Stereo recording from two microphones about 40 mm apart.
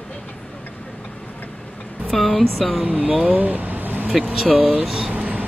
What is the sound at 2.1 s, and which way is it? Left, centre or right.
Speech, centre.